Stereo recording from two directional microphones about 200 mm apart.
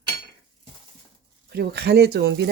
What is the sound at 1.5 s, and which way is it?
Speech, 50° right (ahead or behind).